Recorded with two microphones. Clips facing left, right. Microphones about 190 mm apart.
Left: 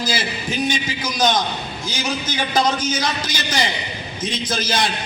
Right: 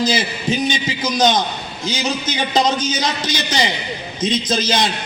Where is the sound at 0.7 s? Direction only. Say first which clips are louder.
Right 3 dB; 20° right (ahead or behind).